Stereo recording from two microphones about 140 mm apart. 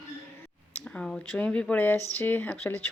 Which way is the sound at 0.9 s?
5° left (ahead or behind).